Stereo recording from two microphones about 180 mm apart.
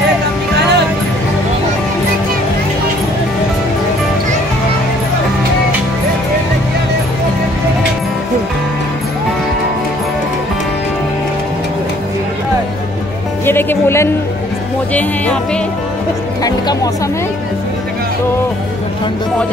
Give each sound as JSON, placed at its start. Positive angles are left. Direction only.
{"t": 13.5, "sound": "speech", "side_deg": 10}
{"t": 15.0, "sound": "music", "side_deg": 5}
{"t": 16.4, "sound": "music", "side_deg": 20}